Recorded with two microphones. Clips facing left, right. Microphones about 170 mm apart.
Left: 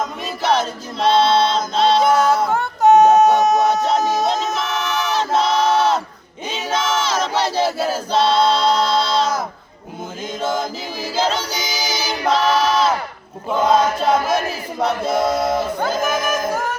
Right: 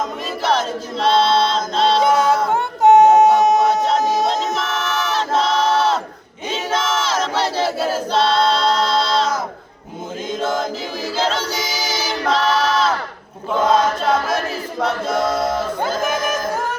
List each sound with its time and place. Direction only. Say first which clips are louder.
0.4 s choir: left 1 dB; centre (ahead or behind)
2.1 s a sound: even; 20° right (ahead or behind)
4.2 s music: even; centre (ahead or behind)
5.1 s crowd: left 1 dB; centre (ahead or behind)
6.7 s battle cry: left 1 dB; centre (ahead or behind)
8.1 s choir: left 2 dB; centre (ahead or behind)
11.3 s choir: right 1 dB; centre (ahead or behind)
13.5 s chant: even; 10° left (ahead or behind)